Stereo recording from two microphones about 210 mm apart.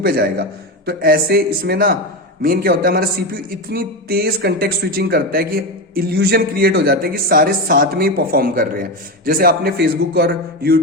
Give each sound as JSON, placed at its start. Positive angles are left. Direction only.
{"t": 0.0, "sound": "speech", "side_deg": -45}